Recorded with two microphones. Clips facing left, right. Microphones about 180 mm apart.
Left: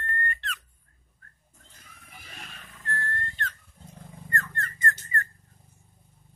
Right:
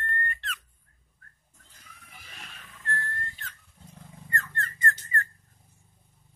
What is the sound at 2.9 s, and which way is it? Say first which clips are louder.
Whistling: left 1 dB; centre (ahead or behind).